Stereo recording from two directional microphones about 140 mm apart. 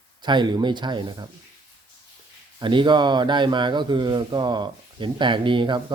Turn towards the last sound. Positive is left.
turn(degrees=-35)  # may be behind; listen again after turning